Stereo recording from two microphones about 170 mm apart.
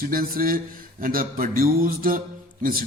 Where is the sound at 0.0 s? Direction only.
60° right (ahead or behind).